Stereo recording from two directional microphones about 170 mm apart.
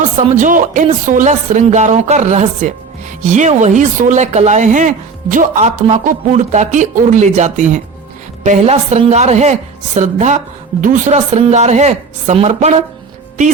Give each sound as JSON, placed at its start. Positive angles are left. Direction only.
{"t": 0.0, "sound": "a woman's voice", "side_deg": -45}